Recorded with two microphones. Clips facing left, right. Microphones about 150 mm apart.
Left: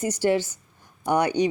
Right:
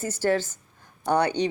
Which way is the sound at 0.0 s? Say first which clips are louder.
Left 2 dB; 15° left (ahead or behind).